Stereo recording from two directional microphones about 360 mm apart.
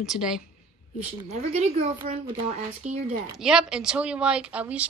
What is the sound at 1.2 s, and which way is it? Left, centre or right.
A woman's voice, centre.